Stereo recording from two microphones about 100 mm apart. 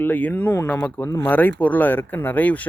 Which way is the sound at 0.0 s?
20° left (ahead or behind).